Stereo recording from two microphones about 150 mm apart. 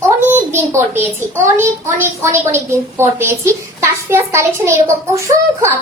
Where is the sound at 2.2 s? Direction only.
20° right (ahead or behind).